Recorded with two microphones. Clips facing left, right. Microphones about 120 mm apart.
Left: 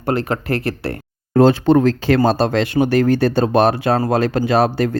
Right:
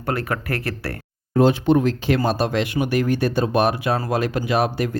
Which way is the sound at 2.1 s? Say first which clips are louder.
Left 5 dB; 30° left (ahead or behind).